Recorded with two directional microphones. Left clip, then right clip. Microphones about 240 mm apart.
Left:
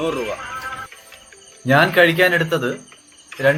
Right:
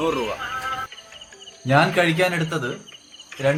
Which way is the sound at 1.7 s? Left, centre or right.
Centre.